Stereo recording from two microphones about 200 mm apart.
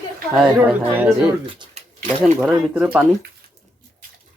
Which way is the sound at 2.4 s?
5° right (ahead or behind).